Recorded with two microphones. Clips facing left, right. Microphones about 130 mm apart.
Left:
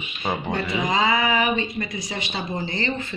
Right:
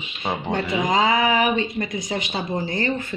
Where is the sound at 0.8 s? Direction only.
45° right (ahead or behind).